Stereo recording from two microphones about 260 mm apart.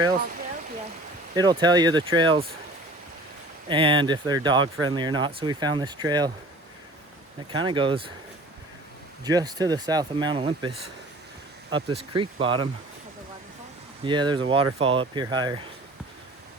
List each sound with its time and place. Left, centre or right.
1.4 s speech: centre
3.7 s speech: centre
7.5 s speech: centre
9.2 s speech: centre
14.0 s speech: centre